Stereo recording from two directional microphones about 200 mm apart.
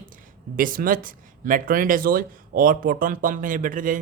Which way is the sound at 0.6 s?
45° right (ahead or behind).